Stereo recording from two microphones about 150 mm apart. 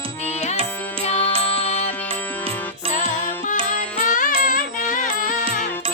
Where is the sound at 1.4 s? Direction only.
40° left (ahead or behind).